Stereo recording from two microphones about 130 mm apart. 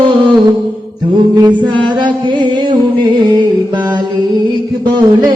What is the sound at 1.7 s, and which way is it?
Music, 35° right (ahead or behind).